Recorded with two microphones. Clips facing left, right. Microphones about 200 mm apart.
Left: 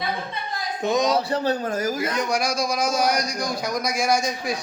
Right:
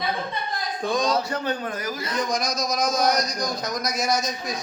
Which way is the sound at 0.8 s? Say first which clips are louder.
Left 3 dB; 20° left (ahead or behind).